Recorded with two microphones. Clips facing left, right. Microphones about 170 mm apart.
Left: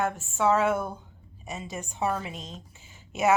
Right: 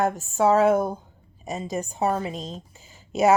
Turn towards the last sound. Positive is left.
turn(degrees=-35)  # may be behind; listen again after turning